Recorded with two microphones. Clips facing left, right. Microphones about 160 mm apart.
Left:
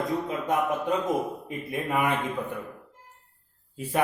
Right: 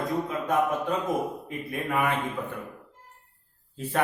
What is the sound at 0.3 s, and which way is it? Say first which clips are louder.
Speech: right 1 dB; 20° left (ahead or behind).